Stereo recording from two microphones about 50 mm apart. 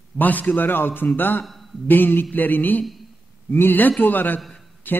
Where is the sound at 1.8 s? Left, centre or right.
Left.